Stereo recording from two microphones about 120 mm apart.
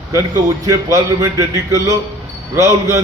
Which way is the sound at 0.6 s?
30° right (ahead or behind).